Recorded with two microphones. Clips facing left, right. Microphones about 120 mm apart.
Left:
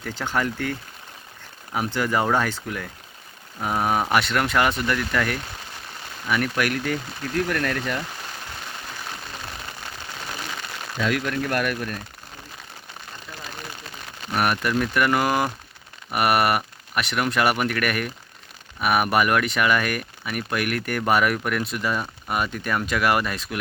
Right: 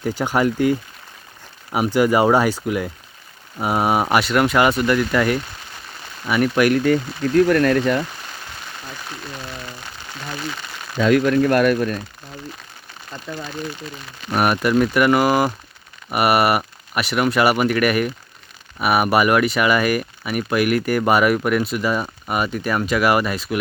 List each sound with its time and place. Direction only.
0.0 s speech: 10° right (ahead or behind)
7.3 s speech: 40° right (ahead or behind)
10.9 s speech: 40° right (ahead or behind)
14.3 s speech: 20° right (ahead or behind)